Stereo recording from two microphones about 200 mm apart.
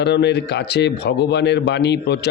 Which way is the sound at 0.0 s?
60° left (ahead or behind).